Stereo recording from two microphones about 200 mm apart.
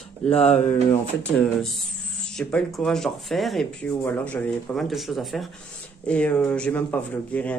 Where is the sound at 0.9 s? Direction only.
5° left (ahead or behind).